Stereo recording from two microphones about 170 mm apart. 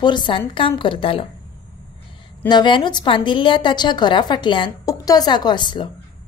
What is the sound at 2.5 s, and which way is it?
A woman's voice, 25° left (ahead or behind).